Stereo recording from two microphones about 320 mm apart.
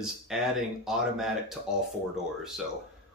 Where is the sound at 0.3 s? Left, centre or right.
Centre.